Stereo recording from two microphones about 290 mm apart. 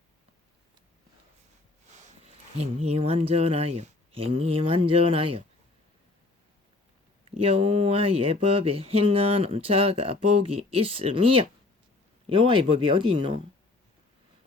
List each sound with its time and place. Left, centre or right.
2.0 s speech: right
7.3 s speech: centre